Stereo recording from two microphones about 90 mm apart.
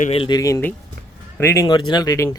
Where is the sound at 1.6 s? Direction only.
55° left (ahead or behind); by 2.3 s 35° left (ahead or behind).